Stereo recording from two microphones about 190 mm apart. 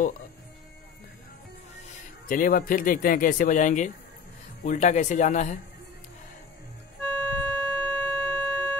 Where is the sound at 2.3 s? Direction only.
50° left (ahead or behind).